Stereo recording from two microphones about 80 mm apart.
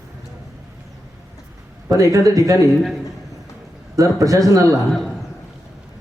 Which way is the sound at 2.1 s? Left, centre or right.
Right.